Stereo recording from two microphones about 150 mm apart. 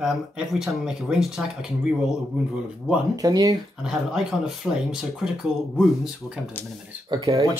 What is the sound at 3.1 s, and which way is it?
Speech, 25° right (ahead or behind).